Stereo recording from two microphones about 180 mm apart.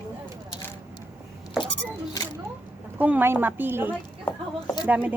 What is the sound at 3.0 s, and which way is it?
Speech, 10° right (ahead or behind).